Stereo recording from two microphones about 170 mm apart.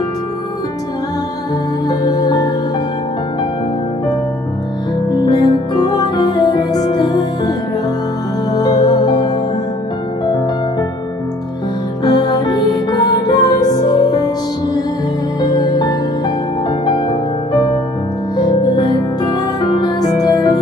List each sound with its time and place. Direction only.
1.9 s music: 20° left (ahead or behind)
5.2 s music: 25° left (ahead or behind)
8.5 s music: 25° left (ahead or behind)
12.0 s music: 25° left (ahead or behind)